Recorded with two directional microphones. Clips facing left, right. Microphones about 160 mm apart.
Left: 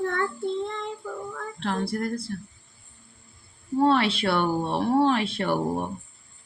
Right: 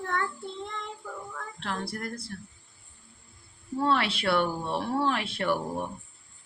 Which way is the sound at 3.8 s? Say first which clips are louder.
Left 5 dB; 25° left (ahead or behind).